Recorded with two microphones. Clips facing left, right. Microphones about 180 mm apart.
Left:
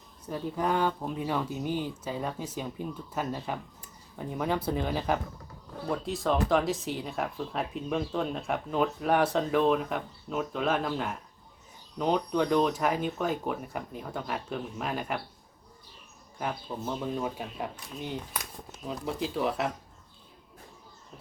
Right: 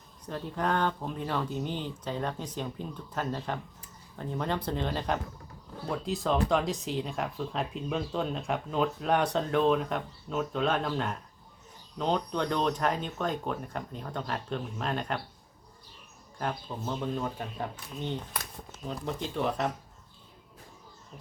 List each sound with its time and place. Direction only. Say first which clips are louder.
0.3 s speech: left 1 dB; 10° left (ahead or behind)
16.4 s speech: even; 5° left (ahead or behind)
19.0 s speech: left 1 dB; 5° left (ahead or behind)